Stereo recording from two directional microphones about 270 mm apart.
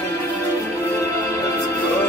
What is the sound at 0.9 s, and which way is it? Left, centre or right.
Music, centre.